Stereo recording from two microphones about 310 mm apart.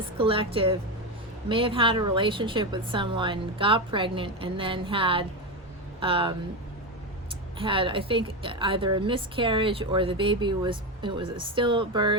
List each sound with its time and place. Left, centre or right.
0.2 s a woman's voice: centre
7.6 s a woman's voice: centre